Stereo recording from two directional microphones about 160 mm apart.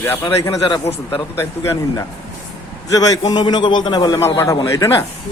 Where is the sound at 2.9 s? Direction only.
20° left (ahead or behind).